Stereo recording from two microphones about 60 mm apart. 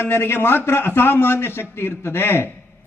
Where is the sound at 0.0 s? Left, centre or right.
Left.